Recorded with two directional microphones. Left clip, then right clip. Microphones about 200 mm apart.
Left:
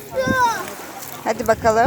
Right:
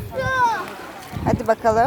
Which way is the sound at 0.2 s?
45° right (ahead or behind).